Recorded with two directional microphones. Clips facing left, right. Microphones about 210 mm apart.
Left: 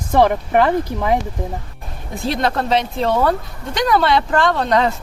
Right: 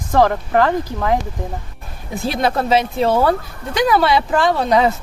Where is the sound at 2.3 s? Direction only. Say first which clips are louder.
Right 1 dB; 5° right (ahead or behind).